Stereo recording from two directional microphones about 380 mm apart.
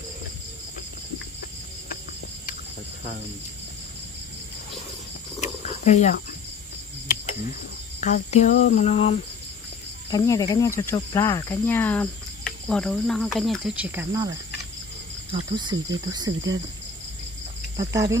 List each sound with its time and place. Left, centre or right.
5.4 s cricket: centre
10.1 s speech: centre
15.3 s speech: centre
17.7 s speech: centre